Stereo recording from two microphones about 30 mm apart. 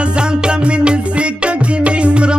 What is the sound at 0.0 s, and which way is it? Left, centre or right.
Music, right.